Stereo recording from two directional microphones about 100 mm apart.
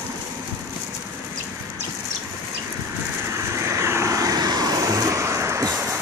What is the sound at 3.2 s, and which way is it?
Vehicle, 30° right (ahead or behind).